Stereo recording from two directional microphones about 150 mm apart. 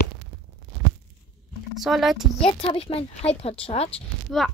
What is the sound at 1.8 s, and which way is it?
Speech, centre (ahead or behind).